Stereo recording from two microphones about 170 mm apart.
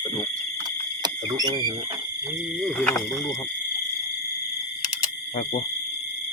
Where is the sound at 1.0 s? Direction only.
25° right (ahead or behind).